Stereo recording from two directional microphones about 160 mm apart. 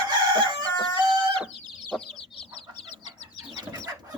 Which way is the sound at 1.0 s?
25° right (ahead or behind).